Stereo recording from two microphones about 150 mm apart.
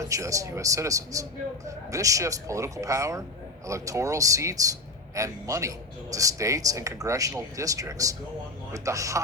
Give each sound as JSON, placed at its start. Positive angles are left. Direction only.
{"t": 0.0, "sound": "a man's voice", "side_deg": -20}